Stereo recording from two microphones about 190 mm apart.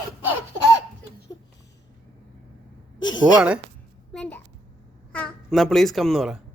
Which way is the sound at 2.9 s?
85° left.